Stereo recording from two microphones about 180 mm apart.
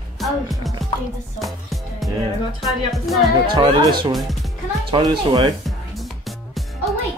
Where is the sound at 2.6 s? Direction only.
Centre (ahead or behind).